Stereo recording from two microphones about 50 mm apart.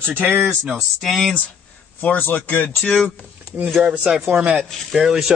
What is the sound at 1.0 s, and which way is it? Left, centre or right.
Speech, centre.